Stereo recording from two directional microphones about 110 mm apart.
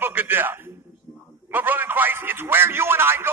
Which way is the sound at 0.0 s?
20° right (ahead or behind).